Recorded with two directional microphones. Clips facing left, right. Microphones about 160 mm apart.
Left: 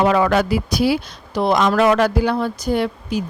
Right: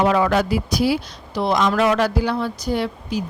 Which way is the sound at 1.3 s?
55° left (ahead or behind).